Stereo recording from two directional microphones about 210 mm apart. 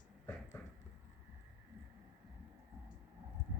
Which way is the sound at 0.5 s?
10° left (ahead or behind).